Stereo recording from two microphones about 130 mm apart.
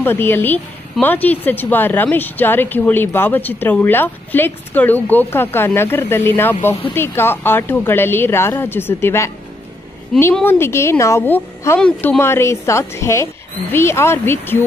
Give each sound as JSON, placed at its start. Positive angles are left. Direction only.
{"t": 0.0, "sound": "a woman's voice", "side_deg": 15}
{"t": 10.4, "sound": "a woman's voice", "side_deg": 15}
{"t": 12.2, "sound": "speech", "side_deg": 20}